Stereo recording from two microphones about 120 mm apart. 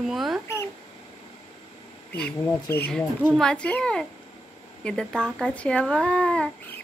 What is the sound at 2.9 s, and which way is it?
A child's voice, 5° left (ahead or behind).